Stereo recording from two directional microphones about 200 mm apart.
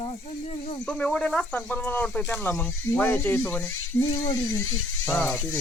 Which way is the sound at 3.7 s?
90° left.